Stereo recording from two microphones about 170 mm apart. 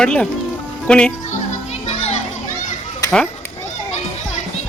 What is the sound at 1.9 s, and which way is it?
Children playing, 40° left (ahead or behind).